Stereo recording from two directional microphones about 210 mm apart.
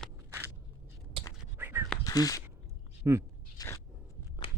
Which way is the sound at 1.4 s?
10° right (ahead or behind).